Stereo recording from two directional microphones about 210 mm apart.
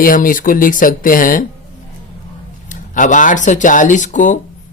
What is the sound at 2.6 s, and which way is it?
Speech, 40° left (ahead or behind).